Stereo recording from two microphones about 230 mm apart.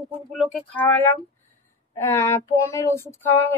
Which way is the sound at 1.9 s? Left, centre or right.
Centre.